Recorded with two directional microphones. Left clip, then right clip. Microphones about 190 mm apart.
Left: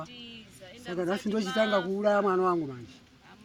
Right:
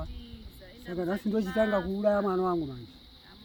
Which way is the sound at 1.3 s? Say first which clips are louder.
Even; 25° right (ahead or behind).